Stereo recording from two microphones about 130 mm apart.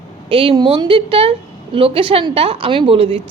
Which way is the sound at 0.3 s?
45° right (ahead or behind).